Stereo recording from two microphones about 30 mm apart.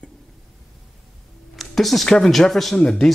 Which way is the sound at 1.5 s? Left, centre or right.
Centre.